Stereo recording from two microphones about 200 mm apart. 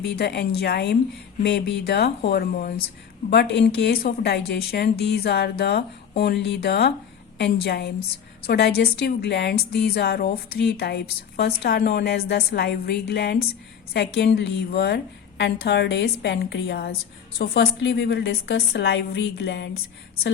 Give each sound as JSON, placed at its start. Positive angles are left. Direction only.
{"t": 0.0, "sound": "a woman's voice", "side_deg": 55}